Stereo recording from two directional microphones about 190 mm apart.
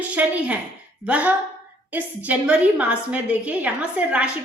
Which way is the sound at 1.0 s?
5° right (ahead or behind).